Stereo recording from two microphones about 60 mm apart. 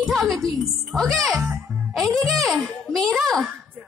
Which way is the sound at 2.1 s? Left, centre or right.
Centre.